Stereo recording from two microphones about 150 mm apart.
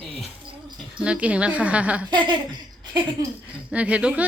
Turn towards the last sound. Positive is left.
turn(degrees=-10)  # may be behind; listen again after turning